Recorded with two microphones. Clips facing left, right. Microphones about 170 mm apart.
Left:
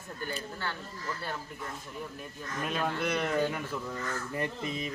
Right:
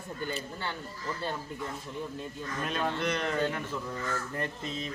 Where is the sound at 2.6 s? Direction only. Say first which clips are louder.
Even; centre (ahead or behind).